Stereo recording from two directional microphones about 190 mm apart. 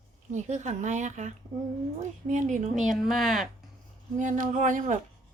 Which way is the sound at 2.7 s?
Centre (ahead or behind).